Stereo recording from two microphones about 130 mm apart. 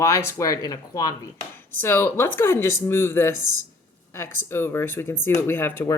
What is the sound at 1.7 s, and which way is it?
A woman's voice, 15° left (ahead or behind).